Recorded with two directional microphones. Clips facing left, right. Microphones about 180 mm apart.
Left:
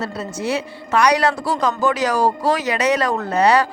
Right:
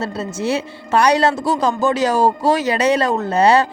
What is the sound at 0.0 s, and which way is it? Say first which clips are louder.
Speech: right 2 dB; 25° right (ahead or behind).